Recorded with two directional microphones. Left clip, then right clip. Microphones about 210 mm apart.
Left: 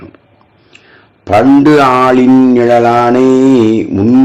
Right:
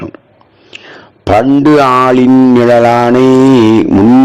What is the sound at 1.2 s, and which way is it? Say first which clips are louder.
Speech: left 1 dB; 35° right (ahead or behind).